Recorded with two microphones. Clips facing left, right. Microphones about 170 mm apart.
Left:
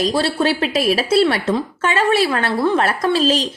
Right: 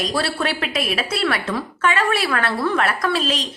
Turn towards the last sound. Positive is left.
turn(degrees=30)  # may be behind; listen again after turning